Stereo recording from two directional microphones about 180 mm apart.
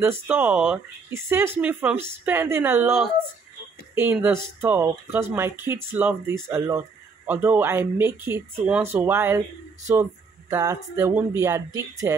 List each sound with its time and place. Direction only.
0.0 s speech: 10° right (ahead or behind)
10.5 s speech: 15° right (ahead or behind)